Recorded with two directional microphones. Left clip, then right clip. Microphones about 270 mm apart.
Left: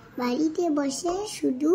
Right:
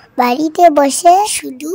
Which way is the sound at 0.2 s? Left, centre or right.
Right.